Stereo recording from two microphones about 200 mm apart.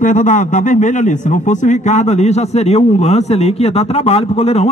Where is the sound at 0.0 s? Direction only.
40° left (ahead or behind).